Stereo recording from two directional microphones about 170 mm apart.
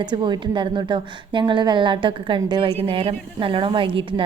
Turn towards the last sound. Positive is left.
turn(degrees=-30)  # may be behind; listen again after turning